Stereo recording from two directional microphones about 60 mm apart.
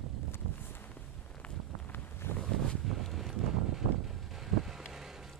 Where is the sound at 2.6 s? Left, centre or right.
Centre.